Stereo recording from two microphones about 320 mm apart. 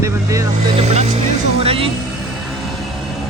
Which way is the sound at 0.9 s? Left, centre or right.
Centre.